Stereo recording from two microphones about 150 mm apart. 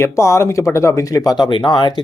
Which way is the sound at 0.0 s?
20° left (ahead or behind).